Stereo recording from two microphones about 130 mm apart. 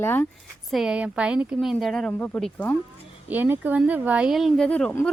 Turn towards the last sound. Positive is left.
turn(degrees=10)  # may be behind; listen again after turning